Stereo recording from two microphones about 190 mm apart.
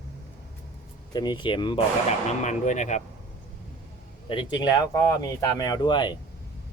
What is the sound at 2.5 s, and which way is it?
Speech, 40° left (ahead or behind).